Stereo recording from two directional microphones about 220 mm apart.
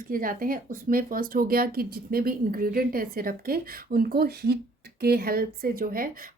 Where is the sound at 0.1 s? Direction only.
40° right (ahead or behind).